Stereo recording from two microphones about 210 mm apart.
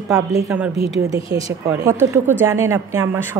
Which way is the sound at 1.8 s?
10° right (ahead or behind).